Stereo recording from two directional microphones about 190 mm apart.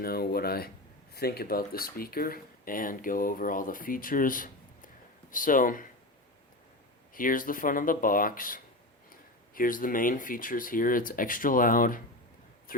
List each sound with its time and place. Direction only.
0.0 s a sound: 55° left (ahead or behind)
1.1 s speech: 55° left (ahead or behind)
7.1 s speech: 45° left (ahead or behind)